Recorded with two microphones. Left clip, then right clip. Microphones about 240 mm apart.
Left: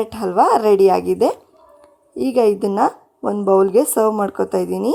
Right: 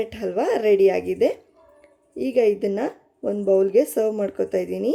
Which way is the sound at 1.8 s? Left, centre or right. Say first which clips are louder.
Left 5 dB; centre.